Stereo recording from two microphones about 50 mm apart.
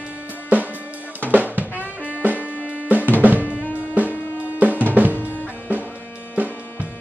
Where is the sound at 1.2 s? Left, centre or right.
Right.